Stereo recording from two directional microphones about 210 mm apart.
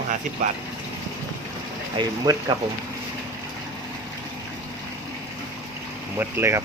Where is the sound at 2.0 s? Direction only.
20° right (ahead or behind).